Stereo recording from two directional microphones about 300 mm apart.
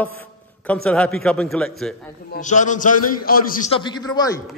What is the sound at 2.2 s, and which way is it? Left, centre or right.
A man's voice, left.